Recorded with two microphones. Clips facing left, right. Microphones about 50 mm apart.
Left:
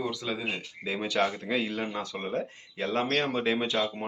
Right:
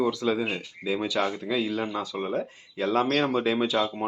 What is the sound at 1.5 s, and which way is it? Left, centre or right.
Speech, left.